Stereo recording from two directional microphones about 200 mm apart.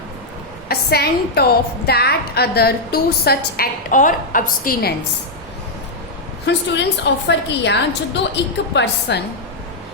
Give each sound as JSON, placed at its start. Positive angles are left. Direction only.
{"t": 0.7, "sound": "a woman's voice", "side_deg": 50}
{"t": 6.4, "sound": "a woman's voice", "side_deg": 60}